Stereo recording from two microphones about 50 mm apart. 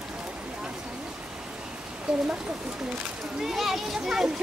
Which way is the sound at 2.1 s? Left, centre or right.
Centre.